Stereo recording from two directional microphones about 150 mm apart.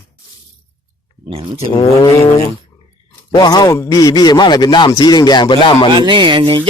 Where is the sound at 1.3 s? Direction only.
40° right (ahead or behind).